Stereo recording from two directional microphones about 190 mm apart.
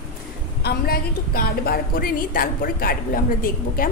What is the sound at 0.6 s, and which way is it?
A woman's voice, 55° left (ahead or behind).